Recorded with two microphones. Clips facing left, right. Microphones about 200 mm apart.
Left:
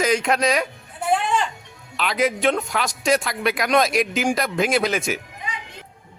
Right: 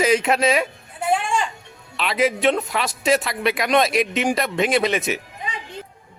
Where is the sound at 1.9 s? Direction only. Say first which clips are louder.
Right 1 dB; centre (ahead or behind).